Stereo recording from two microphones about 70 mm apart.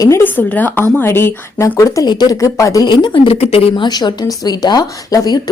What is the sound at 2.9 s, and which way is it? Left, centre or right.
A woman's voice, left.